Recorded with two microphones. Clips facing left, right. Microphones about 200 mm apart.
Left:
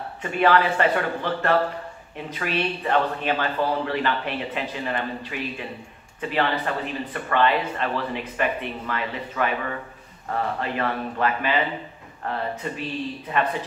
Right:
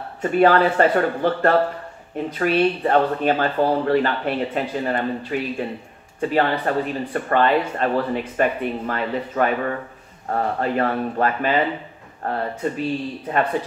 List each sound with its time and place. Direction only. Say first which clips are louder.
0.2 s speech: right 5 dB; 45° right (ahead or behind)